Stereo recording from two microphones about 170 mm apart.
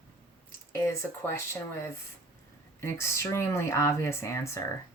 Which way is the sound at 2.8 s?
15° left (ahead or behind).